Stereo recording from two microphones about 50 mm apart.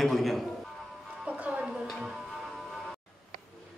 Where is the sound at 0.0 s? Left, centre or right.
Centre.